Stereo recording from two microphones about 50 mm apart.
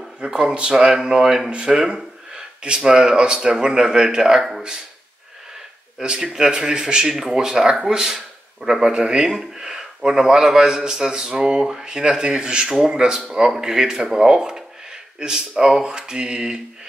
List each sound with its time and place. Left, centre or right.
0.2 s speech: centre
5.9 s speech: centre